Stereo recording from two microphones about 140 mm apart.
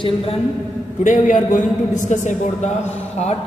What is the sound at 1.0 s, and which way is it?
A man's voice, 65° left (ahead or behind).